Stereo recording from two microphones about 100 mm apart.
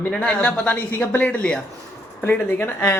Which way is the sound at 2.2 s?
20° left (ahead or behind).